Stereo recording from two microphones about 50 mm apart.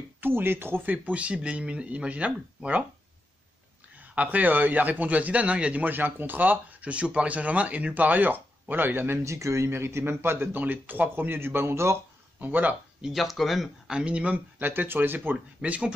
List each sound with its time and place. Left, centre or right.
0.2 s speech: right
0.9 s speech: right
4.0 s a man's voice: right
9.2 s speech: right
12.4 s a man's voice: right
13.1 s speech: centre
13.8 s speech: centre
14.6 s speech: right
15.3 s speech: right